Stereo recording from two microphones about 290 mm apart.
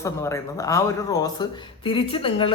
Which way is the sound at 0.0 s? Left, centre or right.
Centre.